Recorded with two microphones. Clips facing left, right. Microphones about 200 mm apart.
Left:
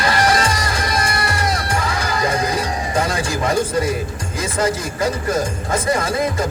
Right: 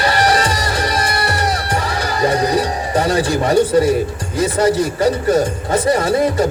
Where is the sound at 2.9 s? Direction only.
35° right (ahead or behind).